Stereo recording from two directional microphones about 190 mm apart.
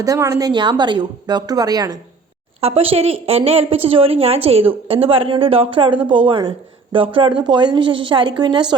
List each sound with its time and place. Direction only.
0.0 s a woman's voice: 15° right (ahead or behind)
2.6 s a woman's voice: 30° right (ahead or behind)